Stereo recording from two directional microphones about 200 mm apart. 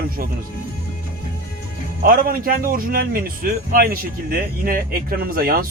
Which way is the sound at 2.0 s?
45° right (ahead or behind).